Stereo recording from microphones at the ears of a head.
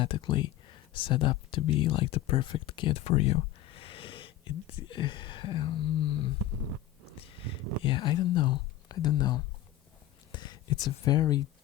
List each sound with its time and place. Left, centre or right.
0.0 s speech: left
6.4 s a sound: right
7.8 s speech: left